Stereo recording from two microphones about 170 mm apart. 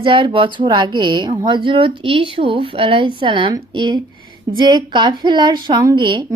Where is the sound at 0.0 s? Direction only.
30° right (ahead or behind).